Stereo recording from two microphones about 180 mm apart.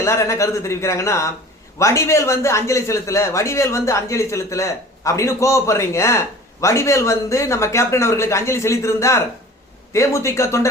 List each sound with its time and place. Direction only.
0.0 s speech: 15° left (ahead or behind)